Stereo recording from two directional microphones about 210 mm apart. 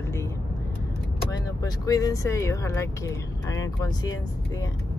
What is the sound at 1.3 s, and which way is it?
Speech, 15° left (ahead or behind).